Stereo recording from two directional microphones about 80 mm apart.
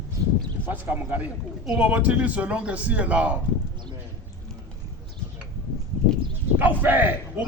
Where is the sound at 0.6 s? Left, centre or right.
Right.